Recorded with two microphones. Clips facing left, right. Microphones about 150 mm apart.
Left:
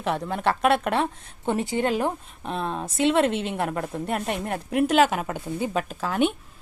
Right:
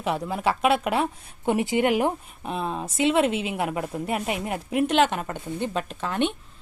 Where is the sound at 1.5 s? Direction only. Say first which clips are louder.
Right 2 dB; 15° right (ahead or behind).